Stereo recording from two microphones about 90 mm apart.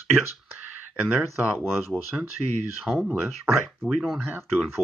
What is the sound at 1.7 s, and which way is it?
Speech, centre (ahead or behind).